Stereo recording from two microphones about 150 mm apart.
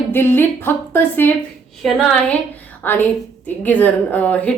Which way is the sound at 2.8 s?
10° left (ahead or behind).